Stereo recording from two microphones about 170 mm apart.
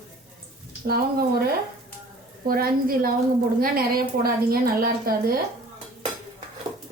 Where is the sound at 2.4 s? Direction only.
60° right (ahead or behind).